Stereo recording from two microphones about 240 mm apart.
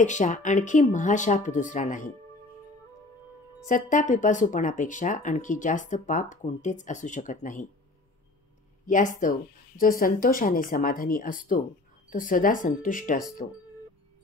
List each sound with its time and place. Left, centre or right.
0.0 s speech: left
3.6 s speech: left
8.8 s speech: left